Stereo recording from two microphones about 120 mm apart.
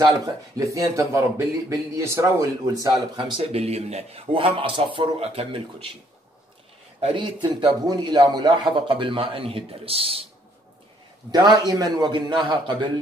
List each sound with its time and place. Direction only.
0.6 s a man's voice: 25° right (ahead or behind)
3.3 s a man's voice: 60° right (ahead or behind)
7.2 s a man's voice: 40° right (ahead or behind)
11.3 s a man's voice: 35° right (ahead or behind)